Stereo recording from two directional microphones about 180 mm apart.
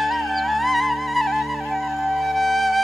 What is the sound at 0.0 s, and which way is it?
Music, centre (ahead or behind).